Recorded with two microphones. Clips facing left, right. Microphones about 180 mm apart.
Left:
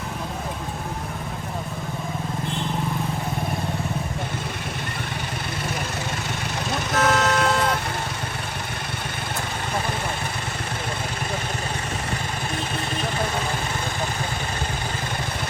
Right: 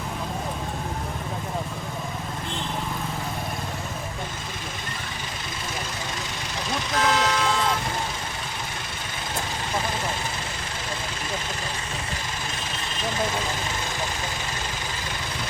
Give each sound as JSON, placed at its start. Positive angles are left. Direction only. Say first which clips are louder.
{"t": 6.7, "sound": "vehicle", "louder": "left 2 dB", "side_deg": 60}